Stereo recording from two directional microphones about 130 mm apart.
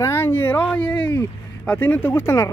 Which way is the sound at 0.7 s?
10° left (ahead or behind).